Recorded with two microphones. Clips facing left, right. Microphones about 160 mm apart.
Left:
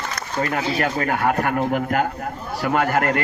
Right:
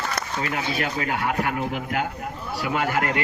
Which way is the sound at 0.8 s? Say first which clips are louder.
Left 6 dB; 50° left (ahead or behind).